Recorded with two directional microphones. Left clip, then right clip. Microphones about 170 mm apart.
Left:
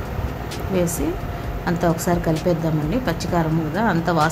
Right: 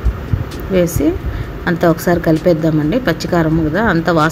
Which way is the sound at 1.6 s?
15° right (ahead or behind).